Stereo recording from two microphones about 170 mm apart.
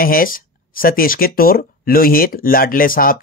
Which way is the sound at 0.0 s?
55° left (ahead or behind).